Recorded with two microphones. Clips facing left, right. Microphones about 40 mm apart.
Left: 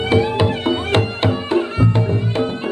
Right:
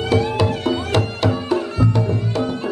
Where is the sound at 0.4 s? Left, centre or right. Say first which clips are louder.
Left 2 dB; left.